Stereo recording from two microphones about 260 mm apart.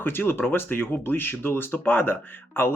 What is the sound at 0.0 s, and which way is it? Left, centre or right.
Speech, centre.